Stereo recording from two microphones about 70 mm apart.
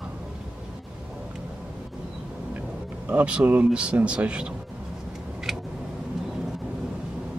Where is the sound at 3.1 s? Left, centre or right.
Centre.